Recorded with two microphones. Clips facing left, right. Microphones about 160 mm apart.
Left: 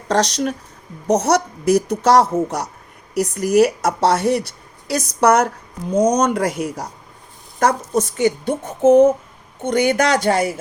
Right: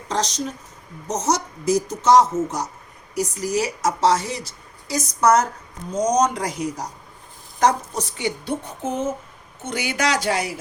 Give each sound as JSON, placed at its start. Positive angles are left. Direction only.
{"t": 0.1, "sound": "a woman's voice", "side_deg": 70}